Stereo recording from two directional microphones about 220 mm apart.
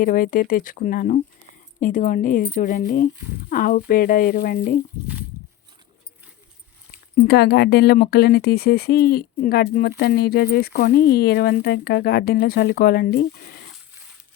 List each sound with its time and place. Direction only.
0.0 s speech: 40° left (ahead or behind)
7.2 s speech: 50° left (ahead or behind)